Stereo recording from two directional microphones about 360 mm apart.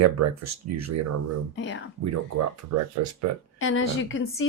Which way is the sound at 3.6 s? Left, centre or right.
Left.